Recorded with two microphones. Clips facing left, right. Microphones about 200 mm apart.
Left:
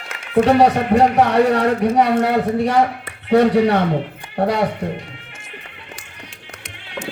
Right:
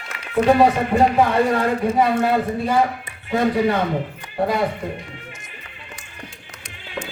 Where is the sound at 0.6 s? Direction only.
70° left (ahead or behind).